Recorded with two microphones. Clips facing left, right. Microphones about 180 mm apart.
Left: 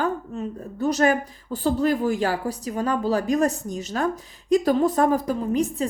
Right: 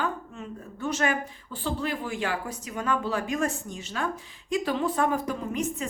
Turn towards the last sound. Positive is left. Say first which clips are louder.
# left 7 dB
turn(degrees=35)  # may be behind; listen again after turning